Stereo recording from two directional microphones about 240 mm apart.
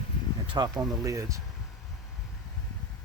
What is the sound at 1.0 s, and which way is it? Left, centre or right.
Speech, centre.